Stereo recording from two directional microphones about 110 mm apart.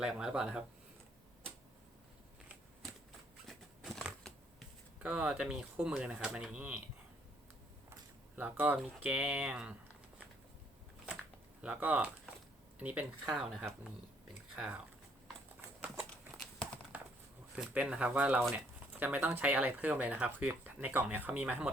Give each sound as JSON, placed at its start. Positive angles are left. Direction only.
{"t": 0.0, "sound": "speech", "side_deg": -5}
{"t": 3.4, "sound": "scissors", "side_deg": 0}
{"t": 4.9, "sound": "speech", "side_deg": -10}
{"t": 8.4, "sound": "speech", "side_deg": -15}
{"t": 11.6, "sound": "speech", "side_deg": -10}
{"t": 16.9, "sound": "a sound", "side_deg": -15}
{"t": 17.6, "sound": "speech", "side_deg": -10}